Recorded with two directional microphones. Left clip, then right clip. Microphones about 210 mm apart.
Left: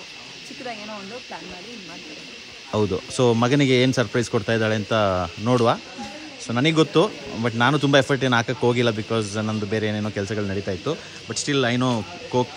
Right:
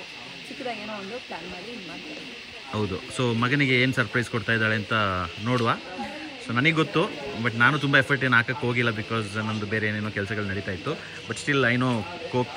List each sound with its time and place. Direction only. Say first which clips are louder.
2.7 s speech: left 7 dB; 15° left (ahead or behind)